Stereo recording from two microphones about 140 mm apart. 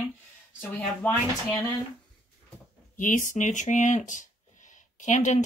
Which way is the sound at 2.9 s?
70° left (ahead or behind).